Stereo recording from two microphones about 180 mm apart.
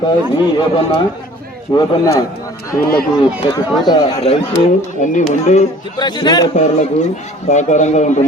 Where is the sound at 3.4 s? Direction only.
25° left (ahead or behind).